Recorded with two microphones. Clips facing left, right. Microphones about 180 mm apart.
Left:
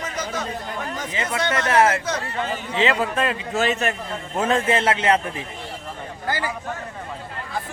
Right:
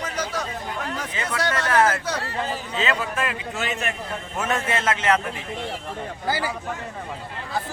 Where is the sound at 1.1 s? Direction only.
25° left (ahead or behind).